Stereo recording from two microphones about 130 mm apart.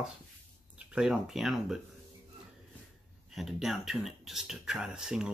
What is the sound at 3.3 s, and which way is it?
Speech, centre (ahead or behind).